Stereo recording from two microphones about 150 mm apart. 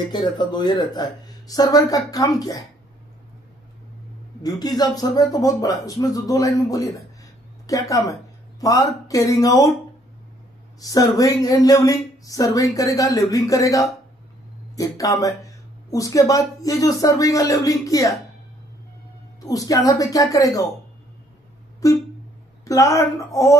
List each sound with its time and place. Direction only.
0.1 s speech: 30° left (ahead or behind)
4.4 s speech: 25° left (ahead or behind)
10.8 s speech: 25° left (ahead or behind)
19.4 s speech: 25° left (ahead or behind)
21.8 s speech: 20° left (ahead or behind)